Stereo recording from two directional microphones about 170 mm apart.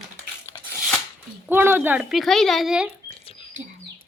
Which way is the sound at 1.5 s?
15° right (ahead or behind).